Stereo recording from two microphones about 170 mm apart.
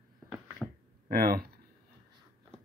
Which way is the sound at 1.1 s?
60° right (ahead or behind).